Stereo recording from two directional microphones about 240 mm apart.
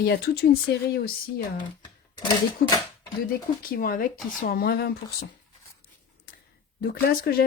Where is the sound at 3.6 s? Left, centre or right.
Left.